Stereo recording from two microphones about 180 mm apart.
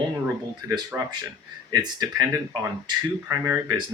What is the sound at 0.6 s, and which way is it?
Speech, 20° right (ahead or behind).